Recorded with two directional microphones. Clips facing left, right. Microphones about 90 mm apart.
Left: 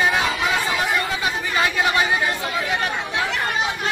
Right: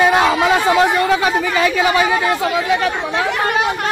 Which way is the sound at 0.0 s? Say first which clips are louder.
Right 8 dB; 80° right.